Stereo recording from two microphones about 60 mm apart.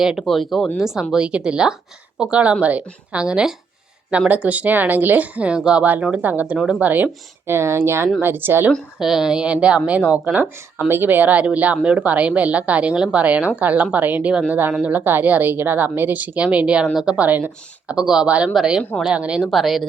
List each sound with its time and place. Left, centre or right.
0.0 s a woman's voice: centre; by 7.1 s right
7.4 s speech: right
9.0 s speech: centre
10.3 s a woman's voice: right
14.8 s a woman's voice: right; by 17.2 s centre
17.2 s a woman's voice: right
17.9 s a woman's voice: centre
19.5 s speech: centre